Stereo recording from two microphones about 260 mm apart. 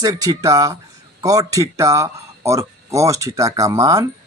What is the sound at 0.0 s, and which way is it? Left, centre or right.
Speech, centre.